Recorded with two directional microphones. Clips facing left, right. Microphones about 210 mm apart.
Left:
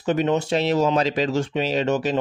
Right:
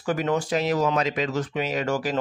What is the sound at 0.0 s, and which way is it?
Speech, 25° left (ahead or behind).